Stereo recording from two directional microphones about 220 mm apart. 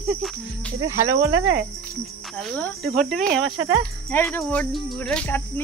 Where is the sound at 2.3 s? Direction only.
5° left (ahead or behind).